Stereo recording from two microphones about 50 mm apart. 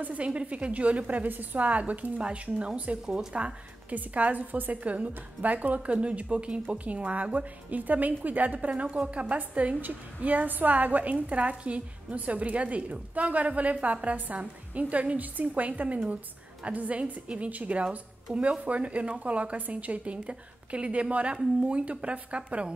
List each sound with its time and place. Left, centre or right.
0.0 s a woman's voice: right